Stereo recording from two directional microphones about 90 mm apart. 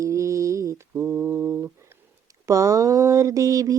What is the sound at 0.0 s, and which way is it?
Mantra, 35° right (ahead or behind).